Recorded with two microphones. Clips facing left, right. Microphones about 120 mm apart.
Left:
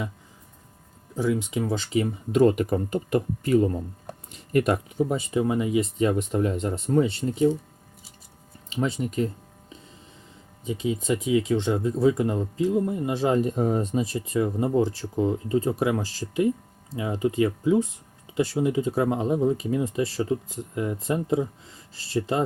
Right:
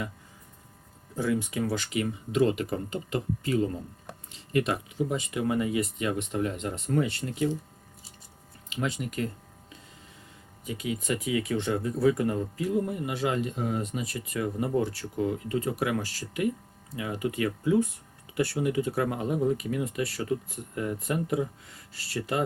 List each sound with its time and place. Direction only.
1.1 s speech: 15° left (ahead or behind)
2.3 s speech: 45° left (ahead or behind)
4.9 s speech: 35° left (ahead or behind)
6.0 s speech: 40° left (ahead or behind)
8.7 s a sound: 30° left (ahead or behind)
10.6 s speech: 25° left (ahead or behind)